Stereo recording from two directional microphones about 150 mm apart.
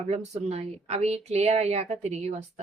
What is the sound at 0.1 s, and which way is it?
A woman's voice, 45° right (ahead or behind).